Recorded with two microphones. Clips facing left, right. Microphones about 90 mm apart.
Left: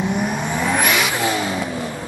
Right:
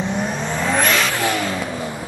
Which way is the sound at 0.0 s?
10° left (ahead or behind).